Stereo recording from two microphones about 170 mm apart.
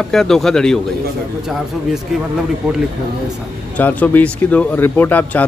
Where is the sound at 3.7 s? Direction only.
10° left (ahead or behind).